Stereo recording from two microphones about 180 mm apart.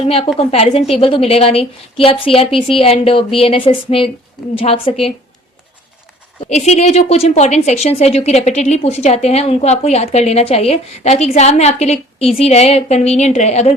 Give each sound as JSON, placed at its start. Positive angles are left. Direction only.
{"t": 0.0, "sound": "a woman's voice", "side_deg": 30}
{"t": 6.5, "sound": "a woman's voice", "side_deg": 40}